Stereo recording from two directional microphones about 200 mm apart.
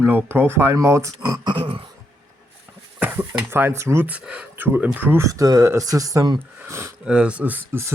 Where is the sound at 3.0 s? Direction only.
10° right (ahead or behind).